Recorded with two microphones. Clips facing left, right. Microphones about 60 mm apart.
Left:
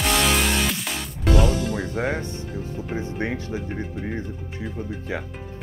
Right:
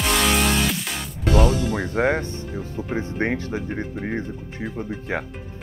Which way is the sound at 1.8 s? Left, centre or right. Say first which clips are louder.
Right 4 dB; right.